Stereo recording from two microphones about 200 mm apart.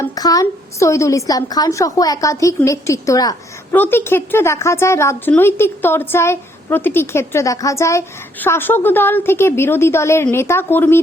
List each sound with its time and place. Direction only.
0.0 s a woman's voice: 20° left (ahead or behind)